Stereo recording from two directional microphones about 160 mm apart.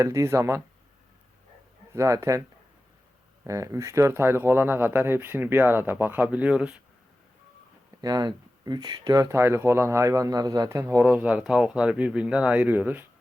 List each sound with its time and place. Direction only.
0.0 s speech: 20° right (ahead or behind)
1.9 s speech: 20° right (ahead or behind)
3.4 s speech: 20° right (ahead or behind)
8.0 s speech: 25° right (ahead or behind); by 13.1 s 10° right (ahead or behind)